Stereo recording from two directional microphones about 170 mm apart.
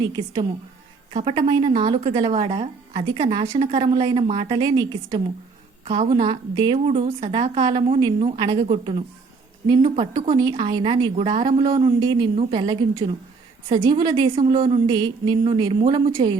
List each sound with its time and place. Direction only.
0.0 s a woman's voice: 25° right (ahead or behind)
3.6 s a woman's voice: 35° right (ahead or behind)
5.8 s a woman's voice: 35° right (ahead or behind)